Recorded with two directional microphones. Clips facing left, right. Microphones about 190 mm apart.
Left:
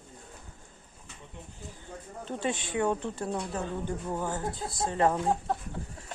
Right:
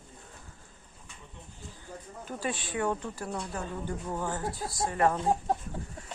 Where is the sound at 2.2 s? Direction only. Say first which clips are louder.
Left 3 dB; 25° left (ahead or behind).